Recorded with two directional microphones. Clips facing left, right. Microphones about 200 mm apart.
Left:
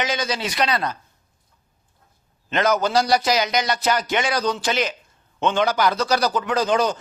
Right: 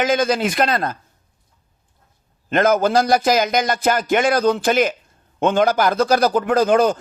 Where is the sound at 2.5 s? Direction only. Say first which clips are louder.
Right 4 dB; 50° right (ahead or behind).